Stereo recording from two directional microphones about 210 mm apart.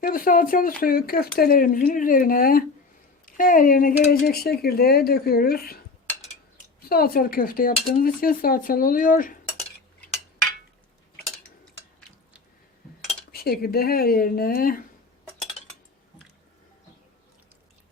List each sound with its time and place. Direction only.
0.0 s speech: 40° left (ahead or behind)
6.8 s speech: 45° left (ahead or behind)
13.3 s speech: 45° left (ahead or behind)